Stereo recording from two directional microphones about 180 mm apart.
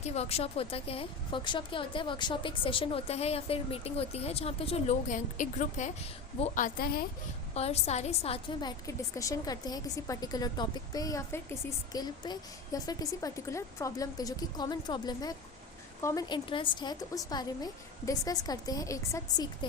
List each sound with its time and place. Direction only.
0.0 s a woman's voice: 35° left (ahead or behind); by 7.0 s 55° left (ahead or behind)
7.5 s a woman's voice: 35° left (ahead or behind)
8.9 s a woman's voice: 20° left (ahead or behind)